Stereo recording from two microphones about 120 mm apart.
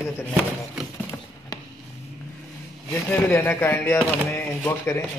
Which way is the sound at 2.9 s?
20° left (ahead or behind).